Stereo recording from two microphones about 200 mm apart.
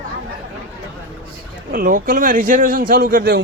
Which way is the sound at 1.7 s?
45° right (ahead or behind).